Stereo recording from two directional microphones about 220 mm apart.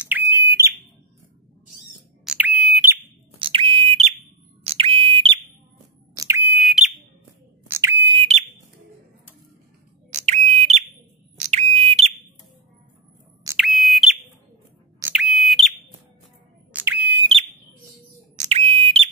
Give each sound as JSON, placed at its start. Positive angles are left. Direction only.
{"t": 0.0, "sound": "bird", "side_deg": -10}
{"t": 2.2, "sound": "alarm", "side_deg": -5}
{"t": 3.3, "sound": "smoke detector", "side_deg": -25}
{"t": 4.6, "sound": "whistle", "side_deg": -25}
{"t": 6.1, "sound": "sine wave", "side_deg": -15}
{"t": 7.6, "sound": "a sound", "side_deg": -10}
{"t": 10.1, "sound": "bird", "side_deg": -30}
{"t": 11.3, "sound": "a sound", "side_deg": -30}
{"t": 13.6, "sound": "smoke detector", "side_deg": 0}
{"t": 15.0, "sound": "a sound", "side_deg": -5}
{"t": 16.7, "sound": "bird", "side_deg": -10}
{"t": 18.3, "sound": "smoke detector", "side_deg": -30}